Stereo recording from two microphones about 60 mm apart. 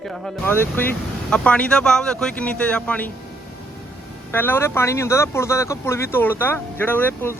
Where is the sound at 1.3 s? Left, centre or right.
Centre.